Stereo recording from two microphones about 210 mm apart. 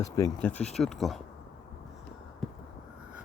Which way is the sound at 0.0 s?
15° left (ahead or behind).